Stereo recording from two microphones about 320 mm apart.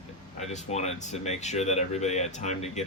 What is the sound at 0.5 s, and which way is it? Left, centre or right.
Speech, left.